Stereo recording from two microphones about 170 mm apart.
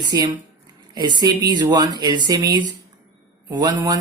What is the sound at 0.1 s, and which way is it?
Speech, 20° right (ahead or behind).